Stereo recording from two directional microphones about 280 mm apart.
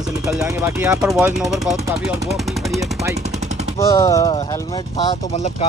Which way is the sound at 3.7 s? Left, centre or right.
Centre.